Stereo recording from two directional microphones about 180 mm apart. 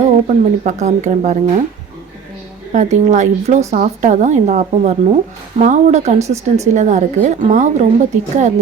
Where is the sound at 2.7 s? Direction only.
40° right (ahead or behind).